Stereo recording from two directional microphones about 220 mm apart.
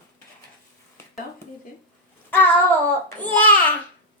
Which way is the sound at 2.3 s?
10° left (ahead or behind).